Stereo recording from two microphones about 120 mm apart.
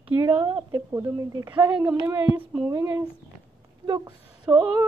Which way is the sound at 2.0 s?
25° right (ahead or behind).